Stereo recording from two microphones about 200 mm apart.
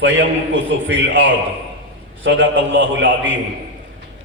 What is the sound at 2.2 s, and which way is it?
A man's voice, 65° right (ahead or behind).